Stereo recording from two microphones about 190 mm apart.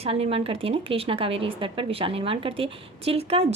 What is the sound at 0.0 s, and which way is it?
A woman's voice, 30° right (ahead or behind).